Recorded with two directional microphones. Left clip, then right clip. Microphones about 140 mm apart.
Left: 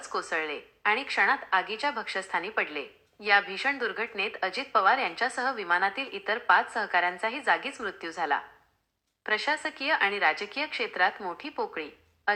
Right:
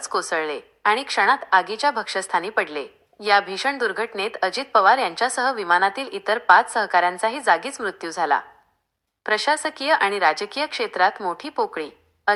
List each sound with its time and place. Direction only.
0.0 s a woman's voice: 45° right (ahead or behind)